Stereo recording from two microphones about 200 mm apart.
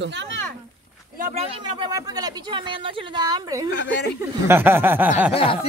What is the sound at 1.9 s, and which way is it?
Speech, 20° right (ahead or behind).